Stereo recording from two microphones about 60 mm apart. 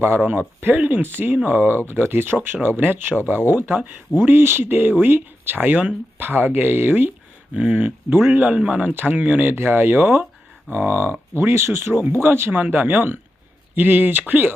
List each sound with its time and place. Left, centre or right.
0.2 s speech: right
7.5 s speech: right
9.5 s speech: right
12.5 s speech: right